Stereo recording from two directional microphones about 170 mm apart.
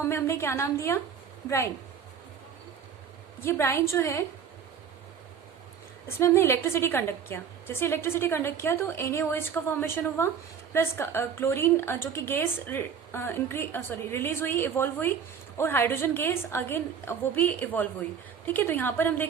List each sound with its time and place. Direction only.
0.0 s a woman's voice: 15° left (ahead or behind)
3.4 s a woman's voice: 15° left (ahead or behind)
6.1 s a woman's voice: 15° left (ahead or behind)